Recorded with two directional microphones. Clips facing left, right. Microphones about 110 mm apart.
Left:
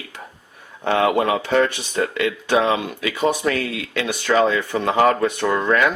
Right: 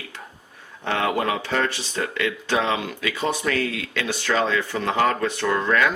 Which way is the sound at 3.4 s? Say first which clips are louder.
Left 3 dB; 30° left (ahead or behind).